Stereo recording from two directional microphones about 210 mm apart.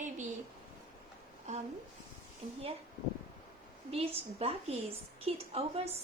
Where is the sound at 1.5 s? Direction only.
35° right (ahead or behind).